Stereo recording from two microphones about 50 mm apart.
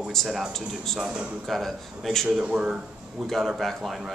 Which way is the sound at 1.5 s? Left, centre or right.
Centre.